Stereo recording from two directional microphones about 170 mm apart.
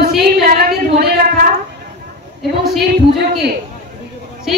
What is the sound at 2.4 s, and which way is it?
Speech, centre (ahead or behind).